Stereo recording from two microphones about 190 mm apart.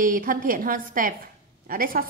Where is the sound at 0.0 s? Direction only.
45° right (ahead or behind).